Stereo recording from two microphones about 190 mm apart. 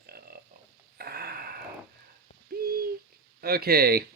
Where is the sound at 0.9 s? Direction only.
55° right (ahead or behind).